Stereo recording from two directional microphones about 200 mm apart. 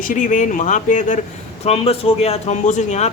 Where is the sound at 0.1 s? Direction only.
40° left (ahead or behind).